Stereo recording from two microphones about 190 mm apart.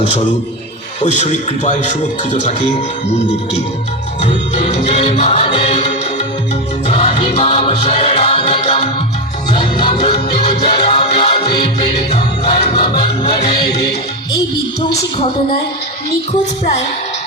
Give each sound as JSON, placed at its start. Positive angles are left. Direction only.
{"t": 1.0, "sound": "speech", "side_deg": 35}
{"t": 6.8, "sound": "music", "side_deg": 35}